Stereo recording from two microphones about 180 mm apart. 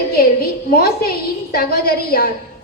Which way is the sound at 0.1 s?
55° left (ahead or behind).